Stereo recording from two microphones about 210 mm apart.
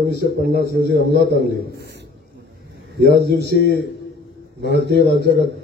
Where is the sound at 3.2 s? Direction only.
50° right (ahead or behind).